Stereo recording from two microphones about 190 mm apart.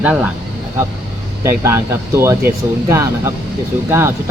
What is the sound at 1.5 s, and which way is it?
Speech, 15° right (ahead or behind).